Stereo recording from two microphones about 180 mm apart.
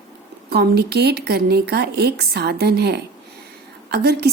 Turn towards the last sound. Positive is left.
turn(degrees=-65)  # may be behind; listen again after turning